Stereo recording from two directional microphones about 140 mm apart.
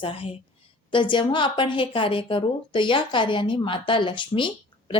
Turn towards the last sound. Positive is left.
turn(degrees=35)  # may be behind; listen again after turning